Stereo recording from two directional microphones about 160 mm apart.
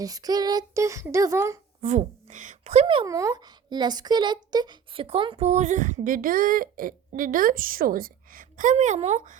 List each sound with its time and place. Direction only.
0.0 s speech: 25° right (ahead or behind)
1.8 s a woman's voice: 45° right (ahead or behind)
3.1 s speech: 20° right (ahead or behind); by 9.4 s 50° right (ahead or behind)